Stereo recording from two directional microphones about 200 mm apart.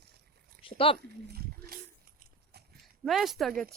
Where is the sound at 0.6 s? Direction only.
25° left (ahead or behind).